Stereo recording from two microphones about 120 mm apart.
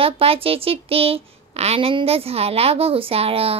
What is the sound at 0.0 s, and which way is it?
Child singing, 50° right (ahead or behind).